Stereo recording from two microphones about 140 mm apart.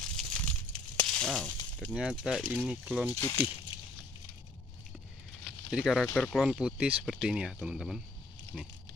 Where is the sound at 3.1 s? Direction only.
25° left (ahead or behind).